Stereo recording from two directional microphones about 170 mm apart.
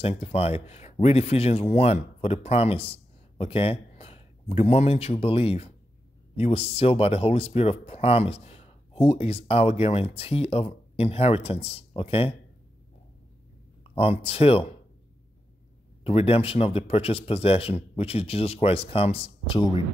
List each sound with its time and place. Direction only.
0.0 s speech: 35° left (ahead or behind)
13.8 s speech: 35° left (ahead or behind)
16.0 s speech: 35° left (ahead or behind)